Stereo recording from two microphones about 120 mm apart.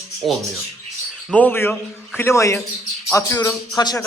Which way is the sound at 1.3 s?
15° left (ahead or behind).